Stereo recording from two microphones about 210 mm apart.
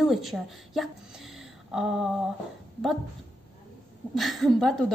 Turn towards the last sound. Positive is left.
turn(degrees=0)  # may be behind; listen again after turning